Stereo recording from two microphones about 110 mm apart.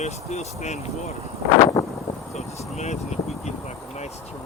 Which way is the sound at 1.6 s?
30° left (ahead or behind).